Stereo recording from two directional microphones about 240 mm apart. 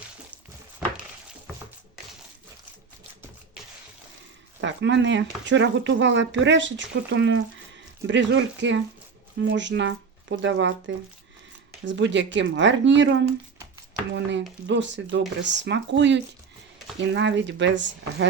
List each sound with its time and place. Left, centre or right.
4.6 s speech: right